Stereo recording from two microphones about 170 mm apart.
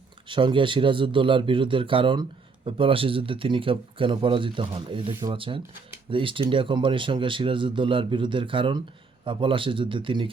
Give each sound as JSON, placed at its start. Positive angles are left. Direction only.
{"t": 0.3, "sound": "speech", "side_deg": -30}